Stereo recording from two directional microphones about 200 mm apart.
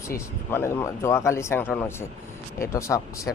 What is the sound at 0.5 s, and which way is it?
Speech, 10° left (ahead or behind).